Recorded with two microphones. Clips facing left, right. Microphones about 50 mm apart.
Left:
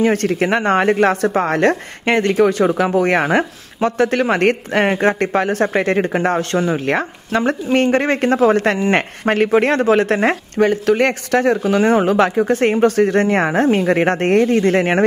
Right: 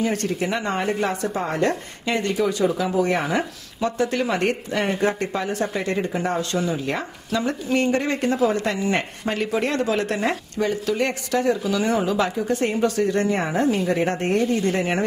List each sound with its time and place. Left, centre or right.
0.0 s speech: left